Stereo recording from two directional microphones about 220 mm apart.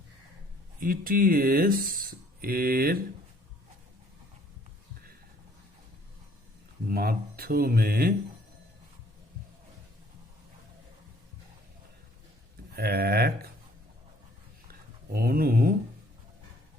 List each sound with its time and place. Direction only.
0.8 s speech: 40° right (ahead or behind)
6.8 s speech: 45° right (ahead or behind)
12.7 s speech: 45° right (ahead or behind)
14.7 s a sound: 45° right (ahead or behind)